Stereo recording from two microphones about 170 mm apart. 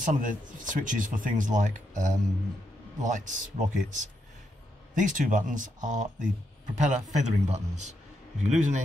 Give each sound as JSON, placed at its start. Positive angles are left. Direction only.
{"t": 0.0, "sound": "speech", "side_deg": -50}